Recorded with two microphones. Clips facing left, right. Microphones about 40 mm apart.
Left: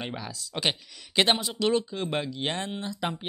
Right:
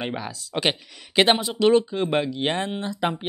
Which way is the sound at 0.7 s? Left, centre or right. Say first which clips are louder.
Right 3 dB; centre.